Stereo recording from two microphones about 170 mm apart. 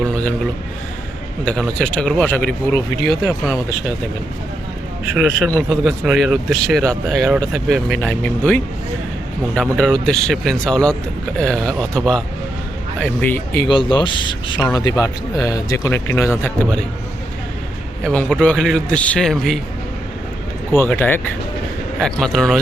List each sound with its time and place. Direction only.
0.0 s a sound: 5° left (ahead or behind)
1.5 s speech: 5° left (ahead or behind)
5.1 s speech: 5° right (ahead or behind); by 13.7 s 10° left (ahead or behind)
13.7 s a man's voice: 30° left (ahead or behind); by 16.8 s 10° left (ahead or behind)
18.0 s speech: 5° left (ahead or behind)
20.7 s speech: 10° left (ahead or behind)